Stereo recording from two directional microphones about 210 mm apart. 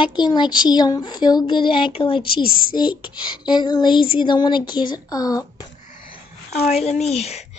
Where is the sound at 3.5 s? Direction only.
20° left (ahead or behind).